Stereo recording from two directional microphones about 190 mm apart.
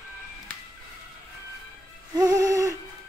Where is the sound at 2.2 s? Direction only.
15° right (ahead or behind).